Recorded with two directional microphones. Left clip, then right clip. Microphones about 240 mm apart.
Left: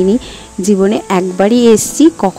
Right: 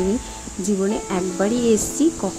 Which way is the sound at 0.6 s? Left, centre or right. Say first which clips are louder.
Left 11 dB; left.